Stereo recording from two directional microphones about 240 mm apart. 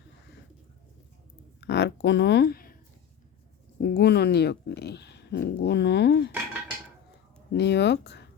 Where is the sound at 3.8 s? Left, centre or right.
Left.